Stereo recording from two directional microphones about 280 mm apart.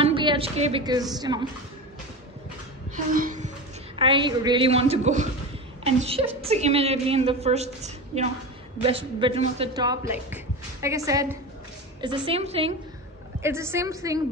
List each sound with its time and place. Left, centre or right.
0.0 s a woman's voice: centre
3.1 s a woman's voice: right
13.4 s speech: centre